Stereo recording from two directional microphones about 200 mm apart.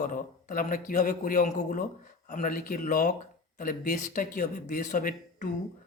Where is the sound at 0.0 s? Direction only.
40° left (ahead or behind).